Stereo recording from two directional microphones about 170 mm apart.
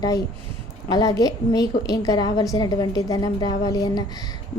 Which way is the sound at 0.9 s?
20° left (ahead or behind).